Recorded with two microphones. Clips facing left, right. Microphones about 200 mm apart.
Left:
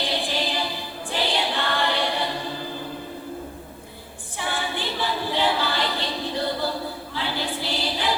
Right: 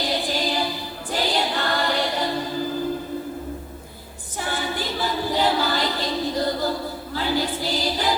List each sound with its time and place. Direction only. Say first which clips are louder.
0.0 s music: right 2 dB; 40° right (ahead or behind)
1.1 s choir: right 2 dB; 40° right (ahead or behind)
4.4 s a capella: right 2 dB; 40° right (ahead or behind)
7.1 s a sound: right 6 dB; 40° right (ahead or behind)